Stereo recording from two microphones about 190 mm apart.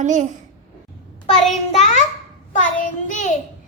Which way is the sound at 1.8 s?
40° left (ahead or behind).